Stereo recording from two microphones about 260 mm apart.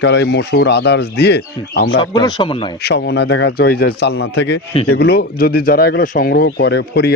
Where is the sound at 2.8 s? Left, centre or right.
Left.